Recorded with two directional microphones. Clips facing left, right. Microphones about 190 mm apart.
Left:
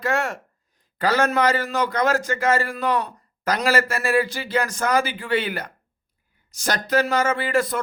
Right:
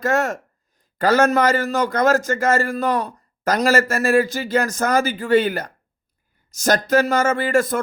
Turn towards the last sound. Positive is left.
turn(degrees=-45)  # may be behind; listen again after turning